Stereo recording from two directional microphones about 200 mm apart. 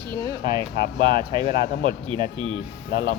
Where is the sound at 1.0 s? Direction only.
25° right (ahead or behind).